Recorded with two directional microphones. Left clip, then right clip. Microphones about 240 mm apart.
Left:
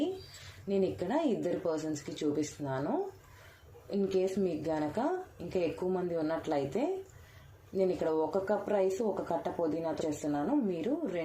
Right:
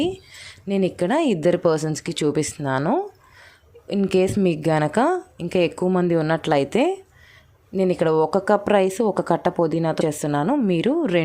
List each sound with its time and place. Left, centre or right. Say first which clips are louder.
0.7 s speech: right 10 dB; right